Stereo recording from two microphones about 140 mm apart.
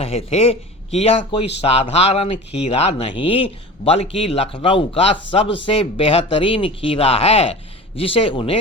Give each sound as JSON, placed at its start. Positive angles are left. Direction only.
{"t": 0.0, "sound": "speech", "side_deg": 45}